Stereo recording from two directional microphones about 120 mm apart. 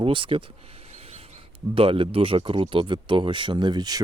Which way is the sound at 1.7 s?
50° right (ahead or behind).